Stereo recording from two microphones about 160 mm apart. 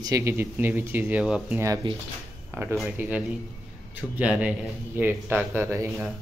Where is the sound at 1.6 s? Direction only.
25° right (ahead or behind).